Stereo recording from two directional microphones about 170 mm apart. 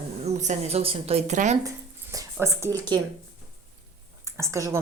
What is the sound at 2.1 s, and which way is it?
Speech, 15° right (ahead or behind).